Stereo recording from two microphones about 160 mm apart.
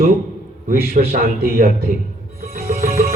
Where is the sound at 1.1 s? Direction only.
70° right (ahead or behind).